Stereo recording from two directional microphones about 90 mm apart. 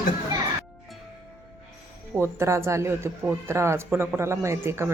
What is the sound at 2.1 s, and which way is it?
Speech, 30° right (ahead or behind).